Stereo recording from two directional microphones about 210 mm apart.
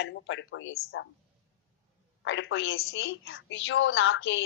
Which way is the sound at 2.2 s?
65° left (ahead or behind).